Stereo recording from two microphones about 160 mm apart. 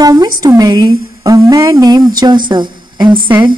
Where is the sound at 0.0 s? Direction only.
25° right (ahead or behind).